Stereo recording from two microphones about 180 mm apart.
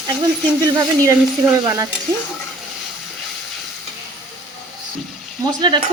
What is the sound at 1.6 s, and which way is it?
Speech, 20° right (ahead or behind).